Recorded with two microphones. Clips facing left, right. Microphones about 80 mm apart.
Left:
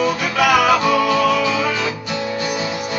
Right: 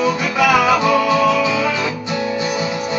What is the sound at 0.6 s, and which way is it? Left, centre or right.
Music, centre.